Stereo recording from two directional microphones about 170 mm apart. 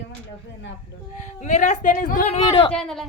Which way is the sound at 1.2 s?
45° left (ahead or behind).